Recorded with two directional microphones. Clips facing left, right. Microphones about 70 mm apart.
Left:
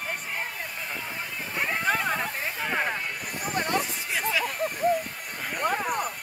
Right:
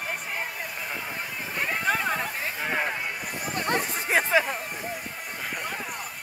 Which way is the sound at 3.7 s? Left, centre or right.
Right.